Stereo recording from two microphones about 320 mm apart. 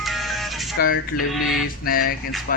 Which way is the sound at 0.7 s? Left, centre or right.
Left.